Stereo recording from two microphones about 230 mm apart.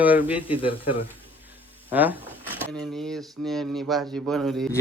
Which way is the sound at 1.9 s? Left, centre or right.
Centre.